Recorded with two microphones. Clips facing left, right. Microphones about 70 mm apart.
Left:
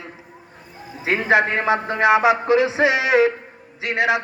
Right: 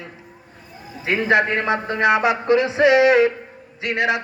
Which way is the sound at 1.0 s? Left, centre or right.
Centre.